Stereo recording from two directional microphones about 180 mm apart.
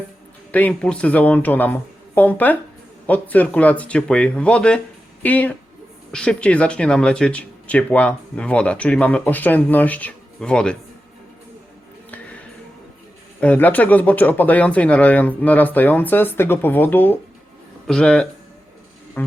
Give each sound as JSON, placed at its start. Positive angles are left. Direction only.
{"t": 0.5, "sound": "speech", "side_deg": 5}
{"t": 13.4, "sound": "speech", "side_deg": 10}